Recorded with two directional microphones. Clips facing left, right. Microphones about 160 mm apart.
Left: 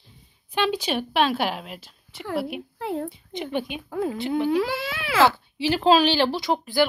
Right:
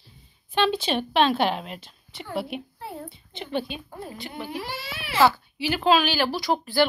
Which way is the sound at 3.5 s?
15° left (ahead or behind).